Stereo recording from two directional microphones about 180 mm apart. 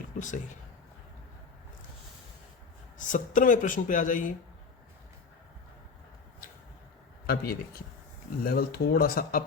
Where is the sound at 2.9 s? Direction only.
45° left (ahead or behind).